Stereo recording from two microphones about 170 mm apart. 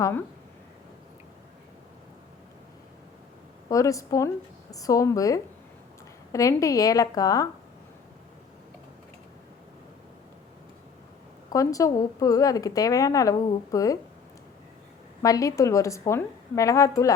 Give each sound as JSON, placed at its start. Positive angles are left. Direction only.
{"t": 0.0, "sound": "speech", "side_deg": 15}
{"t": 3.7, "sound": "a woman's voice", "side_deg": 20}
{"t": 11.5, "sound": "a woman's voice", "side_deg": 20}
{"t": 15.2, "sound": "a woman's voice", "side_deg": 20}